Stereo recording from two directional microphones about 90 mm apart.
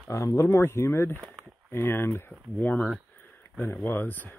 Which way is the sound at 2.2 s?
15° left (ahead or behind).